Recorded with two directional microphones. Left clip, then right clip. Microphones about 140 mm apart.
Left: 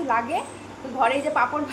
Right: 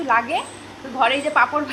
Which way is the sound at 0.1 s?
10° right (ahead or behind).